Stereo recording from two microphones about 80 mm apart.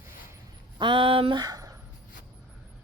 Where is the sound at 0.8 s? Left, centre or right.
Right.